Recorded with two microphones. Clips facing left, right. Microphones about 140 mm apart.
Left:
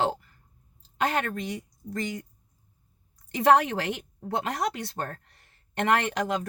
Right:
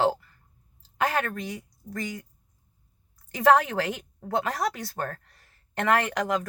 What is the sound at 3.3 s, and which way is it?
Speech, 20° left (ahead or behind).